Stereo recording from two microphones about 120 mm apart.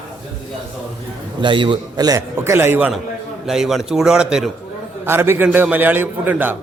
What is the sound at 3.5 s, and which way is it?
A man's voice, centre (ahead or behind).